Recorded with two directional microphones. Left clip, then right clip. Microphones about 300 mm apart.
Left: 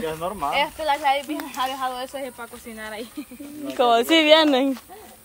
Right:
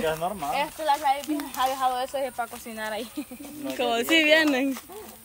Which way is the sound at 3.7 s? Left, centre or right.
Centre.